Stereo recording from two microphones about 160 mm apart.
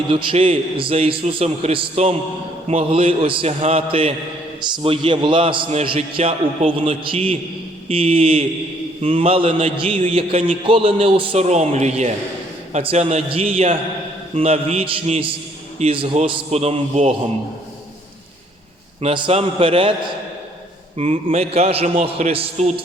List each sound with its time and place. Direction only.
0.1 s a man's voice: 35° right (ahead or behind)
19.0 s a man's voice: 35° right (ahead or behind)
20.9 s a man's voice: 40° right (ahead or behind)